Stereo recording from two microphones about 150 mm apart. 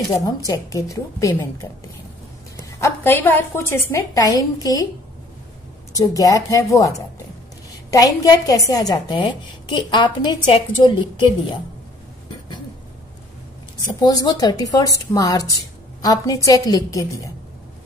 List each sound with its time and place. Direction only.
0.5 s a woman's voice: 20° left (ahead or behind)
5.9 s a woman's voice: 25° left (ahead or behind)
13.9 s a woman's voice: 25° left (ahead or behind)